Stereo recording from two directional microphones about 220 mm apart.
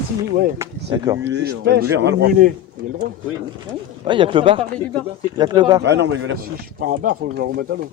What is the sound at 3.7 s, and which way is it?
Speech, 25° right (ahead or behind).